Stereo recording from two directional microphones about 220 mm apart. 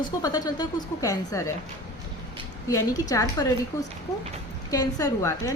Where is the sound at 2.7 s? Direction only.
15° left (ahead or behind).